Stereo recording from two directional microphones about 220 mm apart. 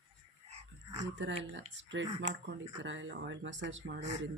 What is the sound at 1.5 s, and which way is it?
Speech, 55° right (ahead or behind).